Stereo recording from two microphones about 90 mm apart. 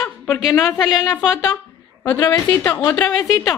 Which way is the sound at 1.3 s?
30° left (ahead or behind).